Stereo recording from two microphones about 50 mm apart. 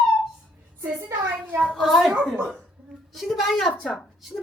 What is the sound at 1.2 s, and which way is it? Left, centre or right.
Speech, right.